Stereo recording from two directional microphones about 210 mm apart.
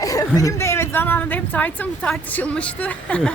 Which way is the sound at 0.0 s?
15° left (ahead or behind).